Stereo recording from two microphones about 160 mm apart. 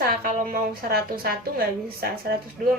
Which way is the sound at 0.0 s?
60° right (ahead or behind).